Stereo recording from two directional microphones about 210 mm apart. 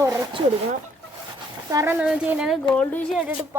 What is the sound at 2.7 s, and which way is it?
Speech, 5° left (ahead or behind).